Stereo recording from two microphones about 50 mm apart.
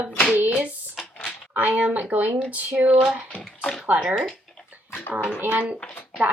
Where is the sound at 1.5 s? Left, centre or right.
Right.